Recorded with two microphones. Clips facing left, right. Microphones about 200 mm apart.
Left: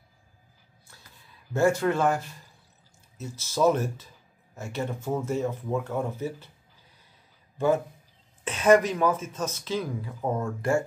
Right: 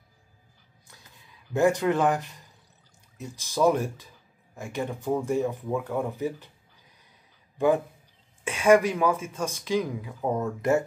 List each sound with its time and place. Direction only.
1.5 s speech: 15° right (ahead or behind)
7.5 s a man's voice: 15° right (ahead or behind)
10.2 s speech: centre (ahead or behind)